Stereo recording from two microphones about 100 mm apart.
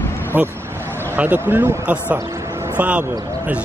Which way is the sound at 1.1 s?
20° right (ahead or behind).